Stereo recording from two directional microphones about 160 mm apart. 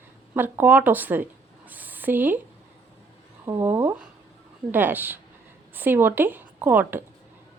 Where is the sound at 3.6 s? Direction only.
15° right (ahead or behind).